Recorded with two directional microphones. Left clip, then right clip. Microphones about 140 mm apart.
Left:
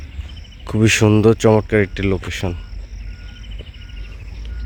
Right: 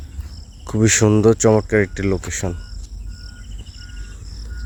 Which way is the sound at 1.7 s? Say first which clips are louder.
Left 1 dB; 20° left (ahead or behind).